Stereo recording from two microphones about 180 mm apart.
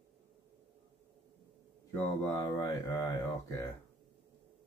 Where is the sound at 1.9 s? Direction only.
15° left (ahead or behind).